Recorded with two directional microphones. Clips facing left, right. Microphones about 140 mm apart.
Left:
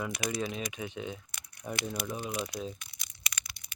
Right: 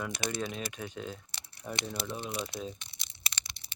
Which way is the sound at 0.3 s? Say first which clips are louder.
Left 2 dB; centre (ahead or behind).